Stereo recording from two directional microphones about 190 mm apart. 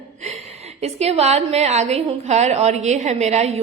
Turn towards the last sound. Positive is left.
turn(degrees=-35)  # may be behind; listen again after turning